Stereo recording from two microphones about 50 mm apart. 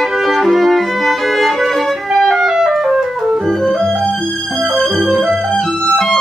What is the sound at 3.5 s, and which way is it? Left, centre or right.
Music, centre.